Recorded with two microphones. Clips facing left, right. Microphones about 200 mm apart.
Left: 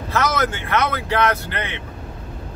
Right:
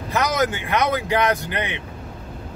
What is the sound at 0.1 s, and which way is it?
A man's voice, 15° right (ahead or behind).